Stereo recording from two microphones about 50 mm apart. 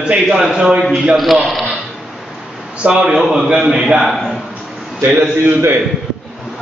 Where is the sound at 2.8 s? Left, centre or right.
Centre.